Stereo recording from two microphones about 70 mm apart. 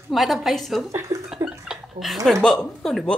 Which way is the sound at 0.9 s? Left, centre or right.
Right.